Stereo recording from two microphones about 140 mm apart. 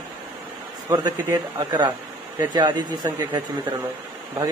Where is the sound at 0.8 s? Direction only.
25° right (ahead or behind).